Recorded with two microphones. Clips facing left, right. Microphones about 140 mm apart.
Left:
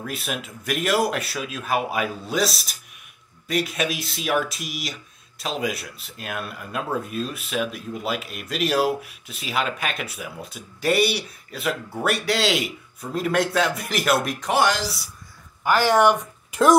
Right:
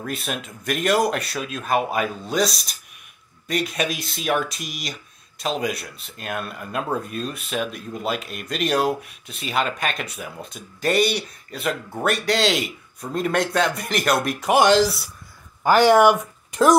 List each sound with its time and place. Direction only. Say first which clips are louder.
0.0 s speech: right 1 dB; 5° left (ahead or behind)
14.4 s speech: right 7 dB; 15° right (ahead or behind)
15.7 s speech: right 5 dB; 20° right (ahead or behind)